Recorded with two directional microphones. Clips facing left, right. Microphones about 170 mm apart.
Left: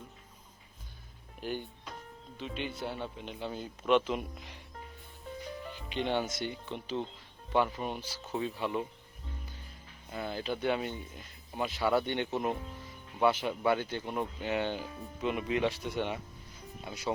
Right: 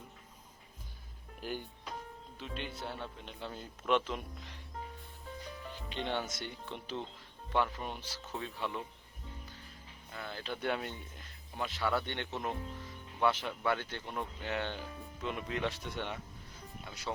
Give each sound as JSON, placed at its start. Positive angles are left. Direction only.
{"t": 1.4, "sound": "music", "side_deg": -5}
{"t": 2.4, "sound": "speech", "side_deg": 0}
{"t": 5.9, "sound": "speech", "side_deg": 5}
{"t": 10.1, "sound": "speech", "side_deg": 15}